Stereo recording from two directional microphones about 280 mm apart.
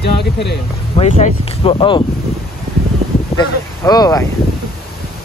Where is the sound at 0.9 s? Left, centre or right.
Left.